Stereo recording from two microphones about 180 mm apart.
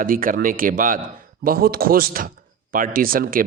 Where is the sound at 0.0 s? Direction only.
50° right (ahead or behind).